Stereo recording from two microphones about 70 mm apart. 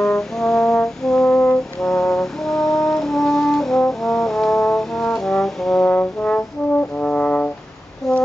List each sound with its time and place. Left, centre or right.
0.0 s brass instrument: centre
5.9 s brass instrument: centre
8.1 s a sound: centre